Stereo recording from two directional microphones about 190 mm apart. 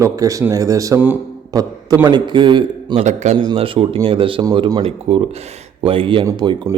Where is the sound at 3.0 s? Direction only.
40° right (ahead or behind).